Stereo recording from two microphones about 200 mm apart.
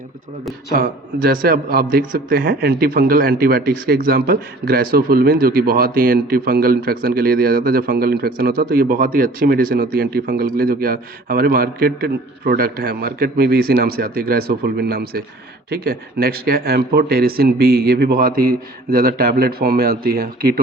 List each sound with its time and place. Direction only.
0.8 s a man's voice: 45° right (ahead or behind)